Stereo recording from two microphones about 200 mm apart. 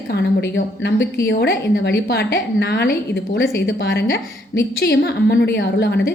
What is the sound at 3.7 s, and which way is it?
A woman's voice, 65° left (ahead or behind).